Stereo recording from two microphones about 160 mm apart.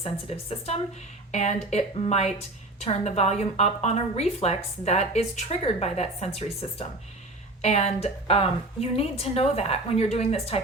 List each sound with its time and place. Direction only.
0.0 s a woman's voice: 40° left (ahead or behind)